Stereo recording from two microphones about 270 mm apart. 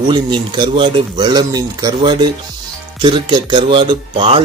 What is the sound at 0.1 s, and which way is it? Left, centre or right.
Speech, centre.